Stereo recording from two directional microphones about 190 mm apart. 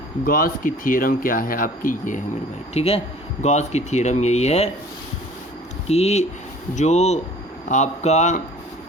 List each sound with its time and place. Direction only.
0.3 s speech: 50° left (ahead or behind)
2.7 s speech: 30° left (ahead or behind)
5.9 s speech: 35° left (ahead or behind)